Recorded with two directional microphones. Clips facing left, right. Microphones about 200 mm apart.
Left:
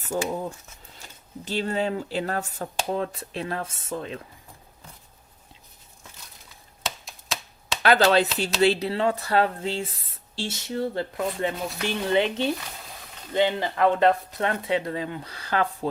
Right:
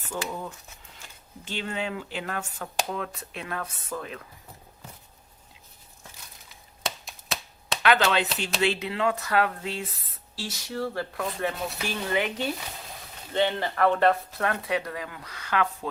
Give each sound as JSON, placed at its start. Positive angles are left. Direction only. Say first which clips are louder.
{"t": 0.1, "sound": "speech", "louder": "left 6 dB", "side_deg": 35}
{"t": 7.8, "sound": "speech", "louder": "left 4 dB", "side_deg": 35}
{"t": 13.3, "sound": "speech", "louder": "left 2 dB", "side_deg": 15}